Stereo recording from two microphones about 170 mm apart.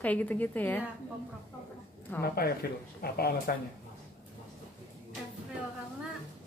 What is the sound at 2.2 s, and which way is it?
Speech, 65° left (ahead or behind).